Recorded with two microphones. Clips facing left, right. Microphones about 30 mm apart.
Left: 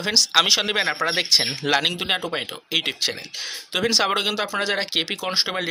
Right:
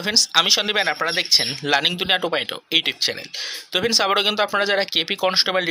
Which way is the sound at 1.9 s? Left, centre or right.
Centre.